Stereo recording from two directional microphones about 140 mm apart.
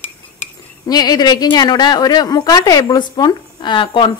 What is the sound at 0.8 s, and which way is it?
A woman's voice, 30° left (ahead or behind).